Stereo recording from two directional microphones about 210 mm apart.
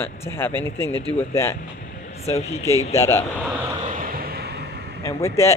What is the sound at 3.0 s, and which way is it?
Speech, 15° left (ahead or behind).